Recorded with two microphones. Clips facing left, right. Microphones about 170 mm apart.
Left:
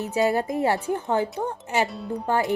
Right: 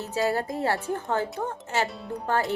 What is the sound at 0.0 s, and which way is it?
A woman's voice, 20° left (ahead or behind).